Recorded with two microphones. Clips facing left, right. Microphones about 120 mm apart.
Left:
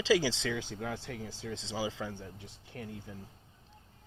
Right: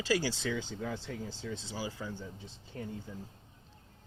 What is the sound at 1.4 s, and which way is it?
A man's voice, 90° left.